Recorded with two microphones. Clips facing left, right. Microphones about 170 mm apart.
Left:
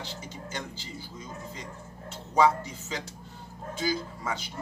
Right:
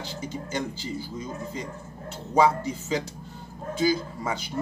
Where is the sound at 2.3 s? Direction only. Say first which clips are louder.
Right 2 dB; 10° right (ahead or behind).